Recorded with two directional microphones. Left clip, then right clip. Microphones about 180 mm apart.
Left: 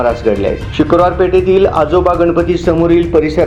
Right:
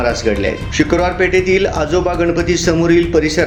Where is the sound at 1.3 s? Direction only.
5° right (ahead or behind).